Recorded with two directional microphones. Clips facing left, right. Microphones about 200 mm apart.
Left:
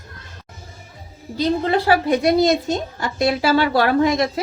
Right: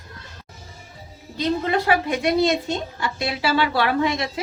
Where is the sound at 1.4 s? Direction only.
35° left (ahead or behind).